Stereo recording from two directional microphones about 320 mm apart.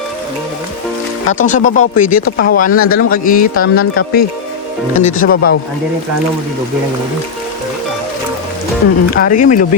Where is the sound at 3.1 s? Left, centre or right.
Left.